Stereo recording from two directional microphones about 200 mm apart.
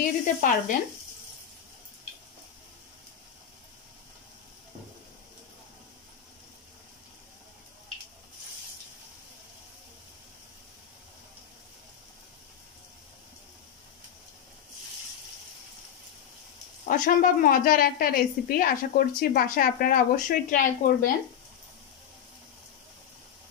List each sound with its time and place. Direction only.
0.0 s a woman's voice: 40° left (ahead or behind)
16.8 s a woman's voice: 40° left (ahead or behind)